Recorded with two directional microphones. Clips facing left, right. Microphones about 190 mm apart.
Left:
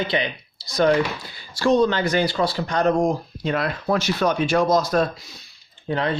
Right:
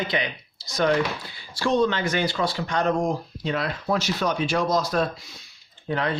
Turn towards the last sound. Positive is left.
turn(degrees=25)  # may be behind; listen again after turning